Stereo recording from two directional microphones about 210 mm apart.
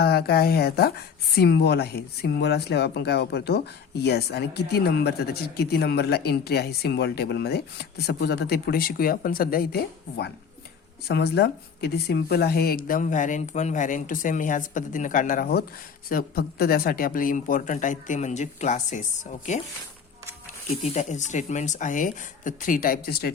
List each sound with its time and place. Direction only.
0.0 s speech: 50° left (ahead or behind)
20.8 s speech: 35° left (ahead or behind)